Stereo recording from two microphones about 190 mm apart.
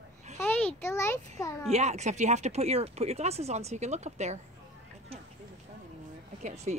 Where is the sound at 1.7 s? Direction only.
35° right (ahead or behind).